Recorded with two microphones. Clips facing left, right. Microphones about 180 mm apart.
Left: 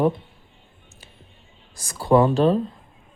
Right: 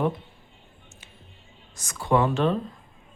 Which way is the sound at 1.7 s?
35° left (ahead or behind).